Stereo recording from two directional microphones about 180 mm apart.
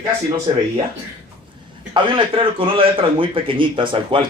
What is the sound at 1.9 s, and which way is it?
A man's voice, 25° right (ahead or behind).